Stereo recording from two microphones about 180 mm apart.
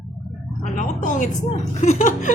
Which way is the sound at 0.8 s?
45° left (ahead or behind).